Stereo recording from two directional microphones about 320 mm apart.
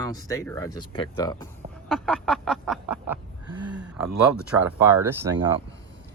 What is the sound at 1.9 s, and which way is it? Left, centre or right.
Speech, centre.